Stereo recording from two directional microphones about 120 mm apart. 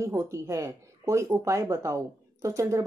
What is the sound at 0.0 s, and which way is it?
Speech, 25° right (ahead or behind).